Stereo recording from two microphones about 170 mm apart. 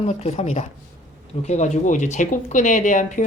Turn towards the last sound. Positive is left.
turn(degrees=45)  # may be behind; listen again after turning